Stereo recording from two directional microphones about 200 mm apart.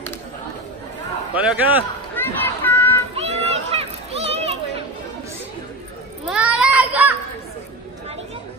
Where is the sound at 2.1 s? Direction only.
10° left (ahead or behind).